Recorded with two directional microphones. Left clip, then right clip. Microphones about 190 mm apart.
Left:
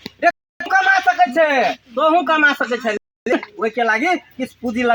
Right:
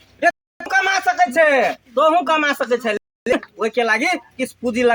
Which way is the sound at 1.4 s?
10° right (ahead or behind).